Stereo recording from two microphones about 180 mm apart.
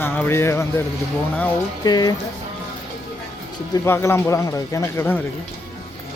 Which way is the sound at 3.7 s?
15° left (ahead or behind).